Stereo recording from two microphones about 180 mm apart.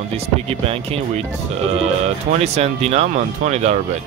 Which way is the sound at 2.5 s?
35° right (ahead or behind).